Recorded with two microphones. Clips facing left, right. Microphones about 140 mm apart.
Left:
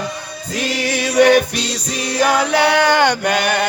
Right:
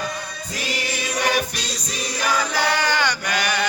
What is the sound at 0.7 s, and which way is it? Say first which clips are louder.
Chant: left 13 dB; 65° left (ahead or behind).